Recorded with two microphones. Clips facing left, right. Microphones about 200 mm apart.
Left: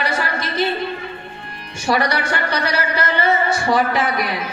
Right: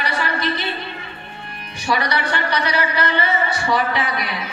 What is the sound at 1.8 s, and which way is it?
A woman's voice, 45° left (ahead or behind).